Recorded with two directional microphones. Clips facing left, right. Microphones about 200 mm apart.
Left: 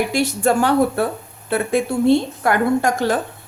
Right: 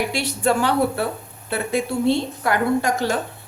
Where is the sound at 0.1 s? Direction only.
45° left (ahead or behind).